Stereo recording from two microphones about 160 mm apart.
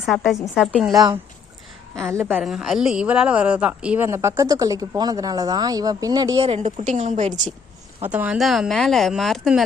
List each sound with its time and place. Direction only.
0.1 s a woman's voice: 10° left (ahead or behind)
0.9 s a woman's voice: 25° right (ahead or behind)
2.4 s speech: centre (ahead or behind); by 6.4 s 25° right (ahead or behind)
6.4 s a woman's voice: 45° right (ahead or behind)
8.0 s speech: 10° right (ahead or behind)